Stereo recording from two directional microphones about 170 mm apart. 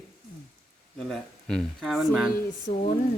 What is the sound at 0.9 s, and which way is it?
Speech, 5° left (ahead or behind).